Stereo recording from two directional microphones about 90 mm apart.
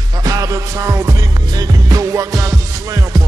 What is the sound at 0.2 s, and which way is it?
Music, 40° right (ahead or behind).